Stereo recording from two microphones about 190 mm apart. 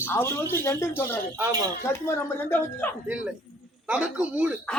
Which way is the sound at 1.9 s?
15° left (ahead or behind).